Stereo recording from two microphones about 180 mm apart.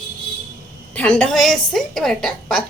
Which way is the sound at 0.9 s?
5° left (ahead or behind).